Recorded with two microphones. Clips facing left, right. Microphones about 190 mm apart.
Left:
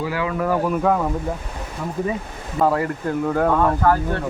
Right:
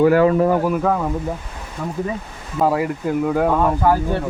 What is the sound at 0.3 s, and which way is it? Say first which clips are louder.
Speech: right 5 dB; 25° right (ahead or behind).